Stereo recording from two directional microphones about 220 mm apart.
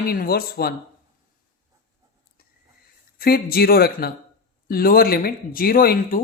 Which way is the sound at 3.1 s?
45° left (ahead or behind).